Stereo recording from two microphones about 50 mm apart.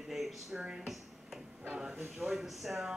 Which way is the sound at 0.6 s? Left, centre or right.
Centre.